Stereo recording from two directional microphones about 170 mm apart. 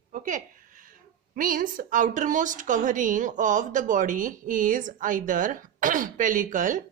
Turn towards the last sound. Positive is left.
turn(degrees=-50)  # may be behind; listen again after turning